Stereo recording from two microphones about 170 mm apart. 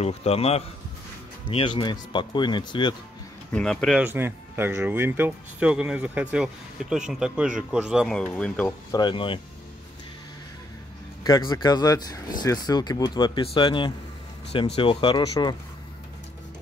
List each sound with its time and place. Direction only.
0.0 s a man's voice: 35° left (ahead or behind)
3.5 s speech: 5° left (ahead or behind)
4.0 s speech: 10° right (ahead or behind)
8.2 s speech: 5° left (ahead or behind)
8.9 s speech: 30° left (ahead or behind)
11.2 s speech: 25° left (ahead or behind)